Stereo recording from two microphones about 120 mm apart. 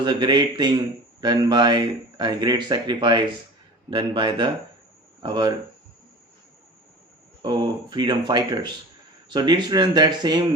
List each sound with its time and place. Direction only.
0.0 s speech: 40° right (ahead or behind)
7.4 s speech: 40° right (ahead or behind)